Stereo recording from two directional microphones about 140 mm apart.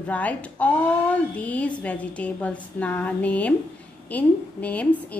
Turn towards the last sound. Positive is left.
turn(degrees=10)  # may be behind; listen again after turning